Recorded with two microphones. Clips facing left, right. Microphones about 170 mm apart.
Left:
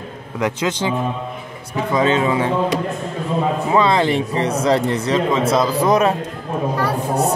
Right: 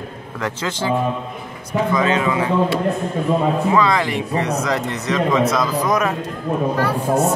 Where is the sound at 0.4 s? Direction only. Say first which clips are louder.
Left 4 dB; 15° left (ahead or behind).